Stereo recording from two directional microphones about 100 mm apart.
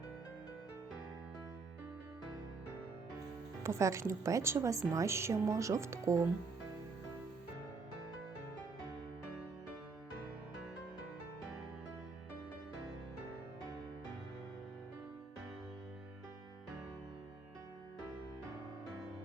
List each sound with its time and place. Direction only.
3.6 s speech: 30° right (ahead or behind)